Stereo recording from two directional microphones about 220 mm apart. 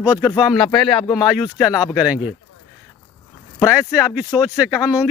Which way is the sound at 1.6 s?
15° left (ahead or behind).